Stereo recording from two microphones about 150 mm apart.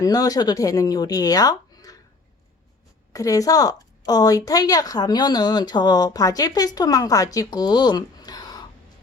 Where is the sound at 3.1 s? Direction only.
20° left (ahead or behind).